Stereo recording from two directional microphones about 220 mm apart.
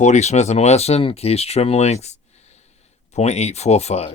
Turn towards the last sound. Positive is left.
turn(degrees=30)  # may be behind; listen again after turning